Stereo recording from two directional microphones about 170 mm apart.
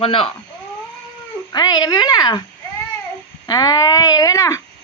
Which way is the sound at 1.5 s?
25° left (ahead or behind).